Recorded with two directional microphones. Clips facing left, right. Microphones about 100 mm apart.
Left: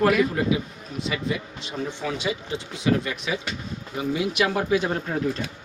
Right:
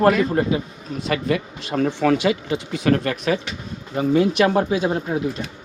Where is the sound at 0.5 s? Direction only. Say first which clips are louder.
Right 4 dB; 40° right (ahead or behind).